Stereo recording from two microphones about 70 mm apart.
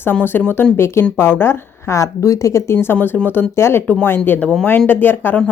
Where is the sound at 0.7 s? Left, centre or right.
Left.